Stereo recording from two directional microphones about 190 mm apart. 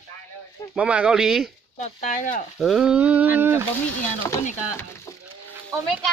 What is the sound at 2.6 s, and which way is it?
Speech, centre (ahead or behind).